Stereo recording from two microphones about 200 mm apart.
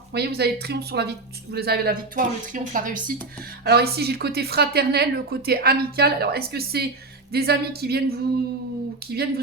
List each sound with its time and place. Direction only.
0.1 s a woman's voice: 55° right (ahead or behind)